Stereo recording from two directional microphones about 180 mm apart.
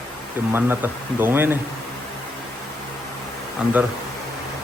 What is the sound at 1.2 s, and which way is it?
Speech, 10° right (ahead or behind).